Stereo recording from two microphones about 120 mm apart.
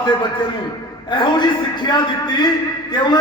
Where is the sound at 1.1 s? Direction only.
40° left (ahead or behind).